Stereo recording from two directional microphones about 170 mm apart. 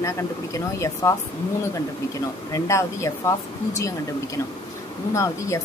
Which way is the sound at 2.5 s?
15° left (ahead or behind).